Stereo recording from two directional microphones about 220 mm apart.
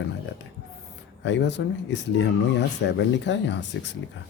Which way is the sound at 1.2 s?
55° left (ahead or behind).